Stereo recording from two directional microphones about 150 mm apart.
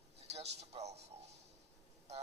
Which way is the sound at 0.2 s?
45° right (ahead or behind).